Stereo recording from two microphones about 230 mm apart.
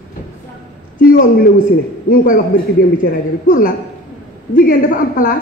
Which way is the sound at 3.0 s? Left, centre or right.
Left.